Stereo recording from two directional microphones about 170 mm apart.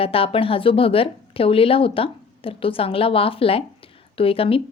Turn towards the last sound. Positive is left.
turn(degrees=35)  # may be behind; listen again after turning